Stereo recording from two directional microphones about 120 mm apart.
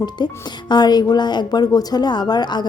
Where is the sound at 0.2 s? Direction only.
40° left (ahead or behind).